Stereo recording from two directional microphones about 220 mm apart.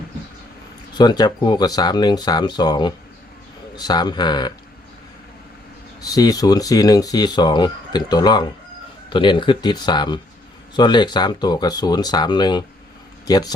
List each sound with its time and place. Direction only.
0.9 s speech: 20° left (ahead or behind)
6.0 s speech: 15° left (ahead or behind)